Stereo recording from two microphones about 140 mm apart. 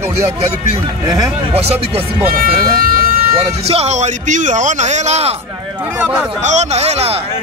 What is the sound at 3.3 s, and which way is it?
A man's voice, 45° right (ahead or behind).